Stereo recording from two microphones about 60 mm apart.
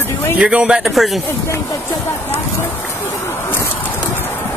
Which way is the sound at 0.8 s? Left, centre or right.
Centre.